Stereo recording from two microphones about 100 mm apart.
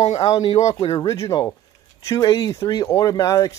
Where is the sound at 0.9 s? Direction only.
40° left (ahead or behind).